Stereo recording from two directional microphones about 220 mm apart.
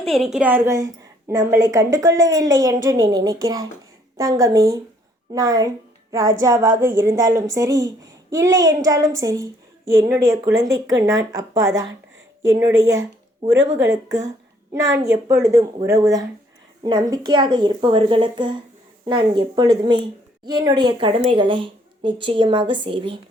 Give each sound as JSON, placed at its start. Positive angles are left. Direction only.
{"t": 0.1, "sound": "a woman's voice", "side_deg": 0}